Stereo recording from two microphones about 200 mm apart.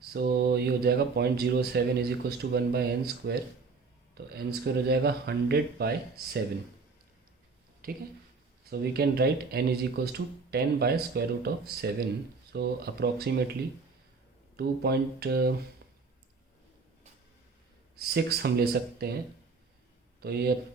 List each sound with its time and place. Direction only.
0.1 s speech: 55° right (ahead or behind)
4.4 s speech: 50° right (ahead or behind)
7.8 s speech: 45° right (ahead or behind)
14.5 s speech: 55° right (ahead or behind)
17.9 s speech: 50° right (ahead or behind)
20.2 s speech: 55° right (ahead or behind)